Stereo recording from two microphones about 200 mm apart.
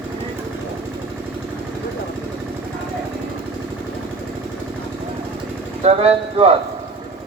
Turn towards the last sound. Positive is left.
turn(degrees=-30)  # may be behind; listen again after turning